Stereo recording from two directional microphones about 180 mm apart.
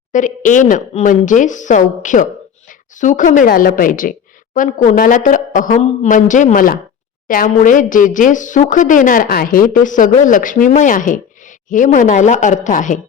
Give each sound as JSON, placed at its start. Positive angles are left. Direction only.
{"t": 0.1, "sound": "speech", "side_deg": 45}